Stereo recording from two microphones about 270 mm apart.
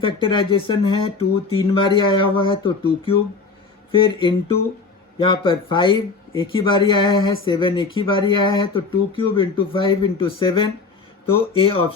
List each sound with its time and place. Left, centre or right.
0.0 s speech: centre
4.2 s speech: centre